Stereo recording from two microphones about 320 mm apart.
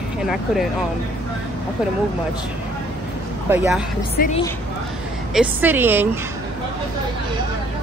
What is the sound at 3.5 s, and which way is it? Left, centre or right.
Speech, centre.